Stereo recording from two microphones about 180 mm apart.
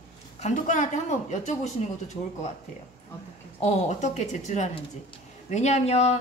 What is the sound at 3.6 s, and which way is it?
A woman's voice, 40° left (ahead or behind).